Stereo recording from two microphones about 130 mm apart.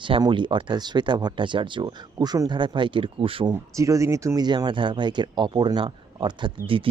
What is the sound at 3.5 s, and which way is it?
Speech, 25° right (ahead or behind).